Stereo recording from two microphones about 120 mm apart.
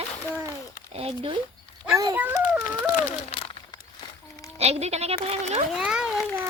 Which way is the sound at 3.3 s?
50° left (ahead or behind).